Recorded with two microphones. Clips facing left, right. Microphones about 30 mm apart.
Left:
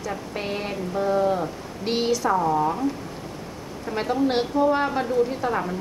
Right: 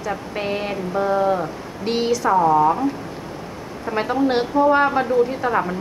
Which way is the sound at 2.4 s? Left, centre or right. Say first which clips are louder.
Right 7 dB; right.